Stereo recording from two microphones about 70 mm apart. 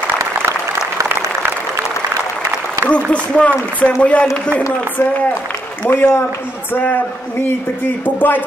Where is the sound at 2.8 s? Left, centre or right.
Right.